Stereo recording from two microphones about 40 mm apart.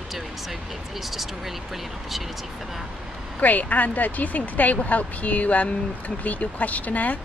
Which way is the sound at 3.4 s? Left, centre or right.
Left.